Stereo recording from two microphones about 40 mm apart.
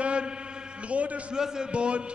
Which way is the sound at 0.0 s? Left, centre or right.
Right.